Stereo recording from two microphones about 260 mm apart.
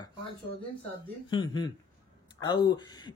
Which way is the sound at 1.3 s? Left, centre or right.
Centre.